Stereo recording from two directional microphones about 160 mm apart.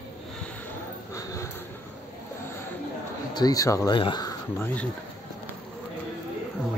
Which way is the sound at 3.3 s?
25° left (ahead or behind).